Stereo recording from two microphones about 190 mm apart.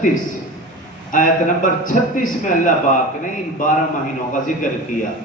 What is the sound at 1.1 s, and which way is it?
A man's voice, 45° left (ahead or behind).